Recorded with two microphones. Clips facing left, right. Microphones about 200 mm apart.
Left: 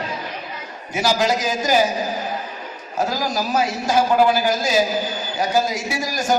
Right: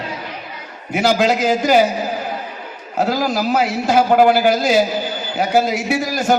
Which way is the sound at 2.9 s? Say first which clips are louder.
Right 4 dB; 60° right (ahead or behind).